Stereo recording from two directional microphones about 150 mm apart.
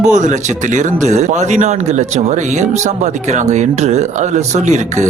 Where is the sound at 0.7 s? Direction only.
50° right (ahead or behind).